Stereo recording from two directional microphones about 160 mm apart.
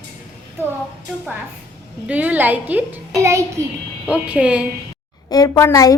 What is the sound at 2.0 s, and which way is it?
A child's voice, 10° right (ahead or behind).